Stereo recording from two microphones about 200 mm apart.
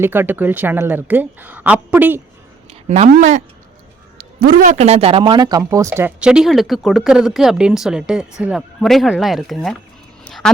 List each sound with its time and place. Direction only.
0.0 s a woman's voice: 10° right (ahead or behind)
2.6 s speech: 35° right (ahead or behind)
4.2 s speech: 45° right (ahead or behind); by 10.5 s 5° left (ahead or behind)